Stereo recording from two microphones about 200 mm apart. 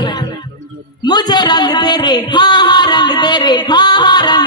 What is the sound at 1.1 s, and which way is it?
Music, 20° left (ahead or behind).